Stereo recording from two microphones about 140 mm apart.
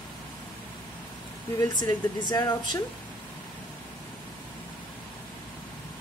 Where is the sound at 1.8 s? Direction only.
30° left (ahead or behind).